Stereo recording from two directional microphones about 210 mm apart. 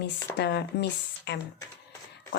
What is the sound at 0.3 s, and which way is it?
Speech, 55° left (ahead or behind).